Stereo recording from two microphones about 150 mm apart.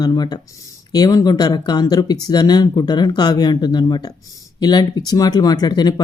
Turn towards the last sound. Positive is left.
turn(degrees=30)  # may be behind; listen again after turning